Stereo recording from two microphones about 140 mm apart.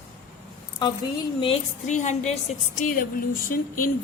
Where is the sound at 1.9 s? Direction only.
60° left (ahead or behind).